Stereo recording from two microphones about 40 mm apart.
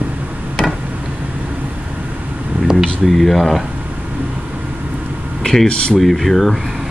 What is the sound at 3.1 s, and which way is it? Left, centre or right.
Speech, centre.